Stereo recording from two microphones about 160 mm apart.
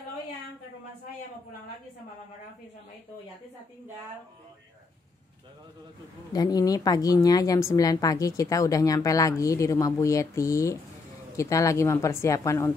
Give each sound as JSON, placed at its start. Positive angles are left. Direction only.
{"t": 6.3, "sound": "a woman's voice", "side_deg": 25}